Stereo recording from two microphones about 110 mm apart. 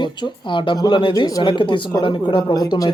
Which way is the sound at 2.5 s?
35° left (ahead or behind).